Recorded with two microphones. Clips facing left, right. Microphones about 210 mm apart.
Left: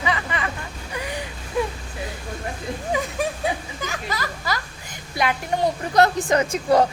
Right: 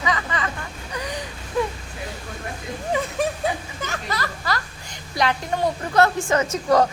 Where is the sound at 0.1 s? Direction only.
20° left (ahead or behind).